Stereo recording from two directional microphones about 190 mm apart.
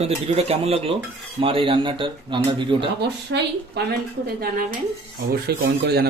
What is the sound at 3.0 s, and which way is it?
Speech, 60° right (ahead or behind).